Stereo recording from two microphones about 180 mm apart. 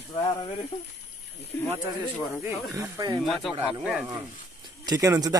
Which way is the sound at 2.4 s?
20° right (ahead or behind).